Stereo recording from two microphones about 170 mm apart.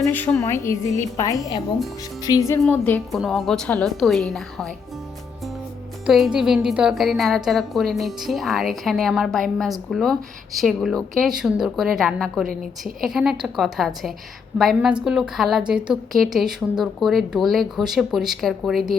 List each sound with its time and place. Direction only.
0.0 s a woman's voice: 10° left (ahead or behind)
2.6 s a woman's voice: 10° left (ahead or behind)
6.1 s a woman's voice: 5° right (ahead or behind)